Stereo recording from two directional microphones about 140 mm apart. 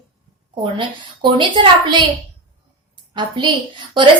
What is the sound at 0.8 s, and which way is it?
A child's voice, 35° right (ahead or behind).